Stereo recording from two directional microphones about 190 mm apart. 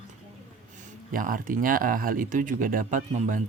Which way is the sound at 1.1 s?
45° right (ahead or behind).